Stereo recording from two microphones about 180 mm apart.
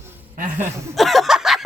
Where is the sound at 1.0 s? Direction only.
Centre (ahead or behind).